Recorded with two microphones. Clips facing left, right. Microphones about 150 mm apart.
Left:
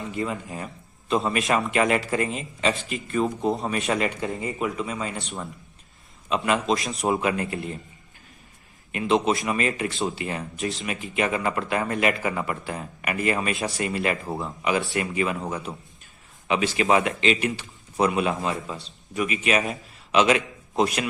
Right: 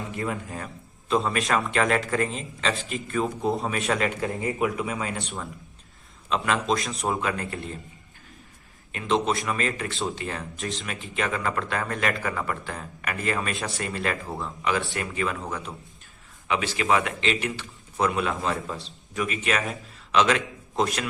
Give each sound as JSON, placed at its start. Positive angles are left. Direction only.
{"t": 0.2, "sound": "a man's voice", "side_deg": 0}
{"t": 7.1, "sound": "speech", "side_deg": 15}
{"t": 8.9, "sound": "a man's voice", "side_deg": 15}
{"t": 9.1, "sound": "a man's voice", "side_deg": 0}
{"t": 9.4, "sound": "speech", "side_deg": 15}
{"t": 18.7, "sound": "a man's voice", "side_deg": 0}
{"t": 19.3, "sound": "a man's voice", "side_deg": 15}